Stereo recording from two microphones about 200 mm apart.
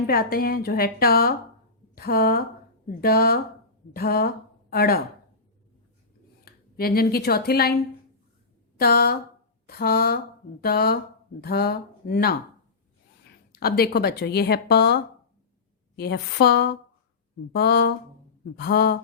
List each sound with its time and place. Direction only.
0.1 s a woman's voice: 50° left (ahead or behind)
6.4 s speech: 50° left (ahead or behind)
8.8 s speech: 50° left (ahead or behind)
13.5 s speech: 50° left (ahead or behind)